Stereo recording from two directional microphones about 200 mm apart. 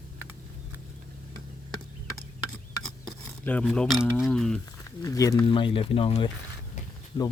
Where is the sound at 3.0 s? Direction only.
5° left (ahead or behind).